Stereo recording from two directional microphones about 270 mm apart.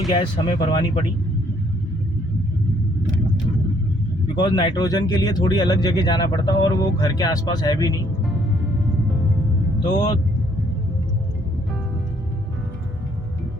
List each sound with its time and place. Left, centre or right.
0.1 s speech: centre
4.4 s speech: centre
9.8 s speech: centre